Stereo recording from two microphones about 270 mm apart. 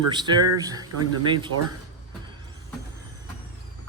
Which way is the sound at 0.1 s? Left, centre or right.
Centre.